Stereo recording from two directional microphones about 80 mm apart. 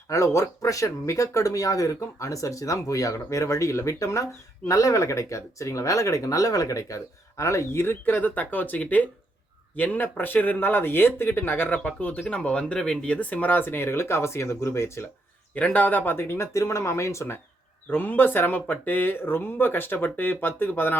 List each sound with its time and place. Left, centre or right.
0.1 s speech: left
15.5 s speech: centre; by 17.4 s left
17.9 s speech: left